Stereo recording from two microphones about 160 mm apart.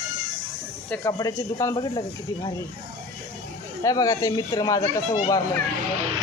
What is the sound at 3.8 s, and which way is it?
Speech, 20° left (ahead or behind).